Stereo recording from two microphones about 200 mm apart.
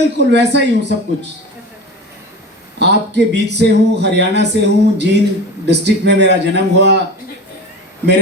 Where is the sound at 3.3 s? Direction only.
60° right (ahead or behind).